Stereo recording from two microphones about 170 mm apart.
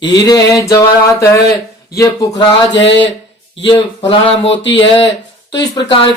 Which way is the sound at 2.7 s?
90° left.